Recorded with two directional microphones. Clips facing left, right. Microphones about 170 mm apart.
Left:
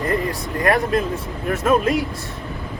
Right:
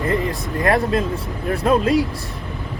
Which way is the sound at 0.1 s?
25° right (ahead or behind).